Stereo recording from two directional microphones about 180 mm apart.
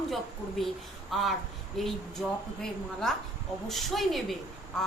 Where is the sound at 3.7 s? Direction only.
Centre (ahead or behind).